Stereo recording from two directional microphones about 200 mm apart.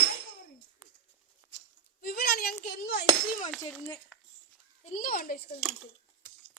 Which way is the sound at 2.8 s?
55° left (ahead or behind).